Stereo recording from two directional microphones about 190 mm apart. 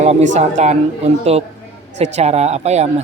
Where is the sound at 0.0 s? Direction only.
35° right (ahead or behind).